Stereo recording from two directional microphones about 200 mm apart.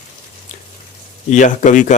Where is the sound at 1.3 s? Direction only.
40° left (ahead or behind).